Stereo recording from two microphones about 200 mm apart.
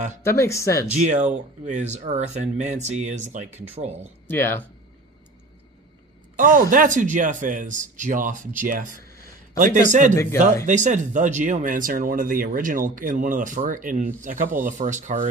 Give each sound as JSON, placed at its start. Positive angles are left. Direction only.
{"t": 0.2, "sound": "speech", "side_deg": 15}
{"t": 0.9, "sound": "speech", "side_deg": -35}
{"t": 4.3, "sound": "speech", "side_deg": 10}
{"t": 6.3, "sound": "speech", "side_deg": -40}